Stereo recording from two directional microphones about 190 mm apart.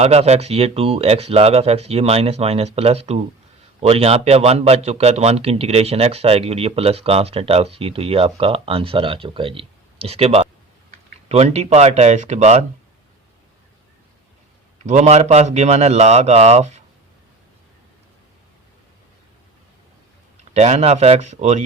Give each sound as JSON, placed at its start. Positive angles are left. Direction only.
{"t": 0.0, "sound": "speech", "side_deg": -35}
{"t": 14.8, "sound": "speech", "side_deg": -40}
{"t": 20.5, "sound": "speech", "side_deg": -35}